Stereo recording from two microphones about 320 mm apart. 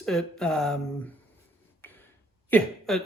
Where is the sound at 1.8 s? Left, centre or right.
Centre.